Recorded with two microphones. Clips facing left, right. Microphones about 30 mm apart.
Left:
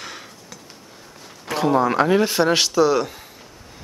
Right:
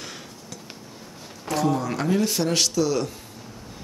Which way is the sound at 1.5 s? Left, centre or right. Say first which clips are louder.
Left 5 dB; left.